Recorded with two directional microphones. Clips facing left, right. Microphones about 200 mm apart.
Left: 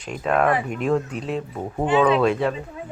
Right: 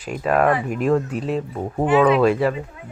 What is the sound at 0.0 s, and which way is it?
Speech, 5° right (ahead or behind).